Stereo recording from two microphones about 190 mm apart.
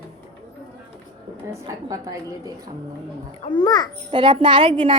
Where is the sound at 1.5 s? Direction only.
20° right (ahead or behind).